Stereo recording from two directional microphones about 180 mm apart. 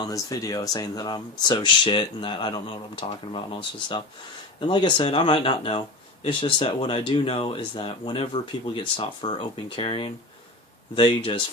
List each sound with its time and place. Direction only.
0.0 s speech: 20° left (ahead or behind)